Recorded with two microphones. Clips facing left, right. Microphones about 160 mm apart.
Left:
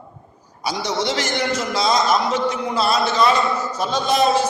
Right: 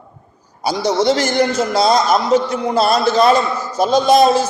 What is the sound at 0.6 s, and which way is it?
A man's voice, 40° right (ahead or behind).